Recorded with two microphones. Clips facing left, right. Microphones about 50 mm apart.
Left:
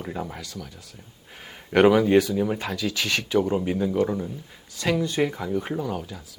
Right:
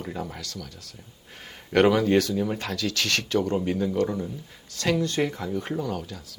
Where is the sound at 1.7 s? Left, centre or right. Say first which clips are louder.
Left 3 dB; centre.